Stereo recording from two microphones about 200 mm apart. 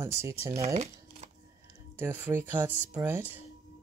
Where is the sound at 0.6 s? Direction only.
35° right (ahead or behind).